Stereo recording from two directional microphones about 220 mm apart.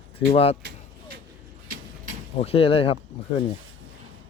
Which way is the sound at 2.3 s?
25° left (ahead or behind).